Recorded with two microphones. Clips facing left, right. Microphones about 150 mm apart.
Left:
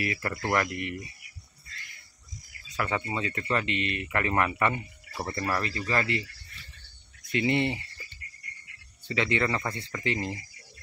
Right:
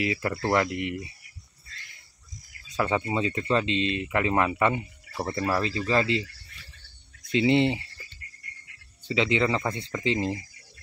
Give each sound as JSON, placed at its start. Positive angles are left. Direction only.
{"t": 0.0, "sound": "speech", "side_deg": -20}
{"t": 2.7, "sound": "speech", "side_deg": -20}
{"t": 7.3, "sound": "speech", "side_deg": -20}
{"t": 9.0, "sound": "speech", "side_deg": -15}